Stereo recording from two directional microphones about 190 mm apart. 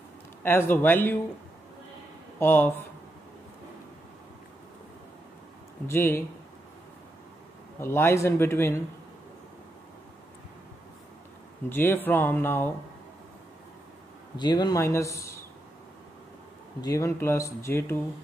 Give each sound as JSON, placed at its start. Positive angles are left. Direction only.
{"t": 0.4, "sound": "speech", "side_deg": 10}
{"t": 2.3, "sound": "speech", "side_deg": 10}
{"t": 5.9, "sound": "speech", "side_deg": 15}
{"t": 7.8, "sound": "speech", "side_deg": 15}
{"t": 11.7, "sound": "speech", "side_deg": 10}
{"t": 14.3, "sound": "speech", "side_deg": 20}
{"t": 16.8, "sound": "speech", "side_deg": 15}